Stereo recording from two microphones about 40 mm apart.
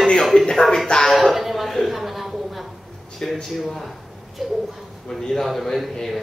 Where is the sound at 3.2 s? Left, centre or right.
Centre.